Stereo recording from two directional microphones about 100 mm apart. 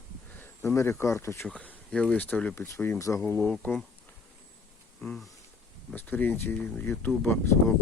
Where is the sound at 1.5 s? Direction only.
15° left (ahead or behind).